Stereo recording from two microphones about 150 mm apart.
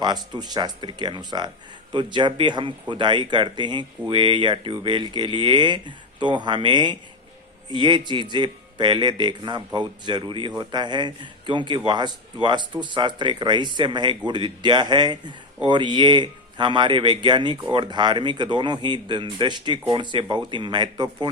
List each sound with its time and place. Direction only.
0.0 s a man's voice: 30° right (ahead or behind)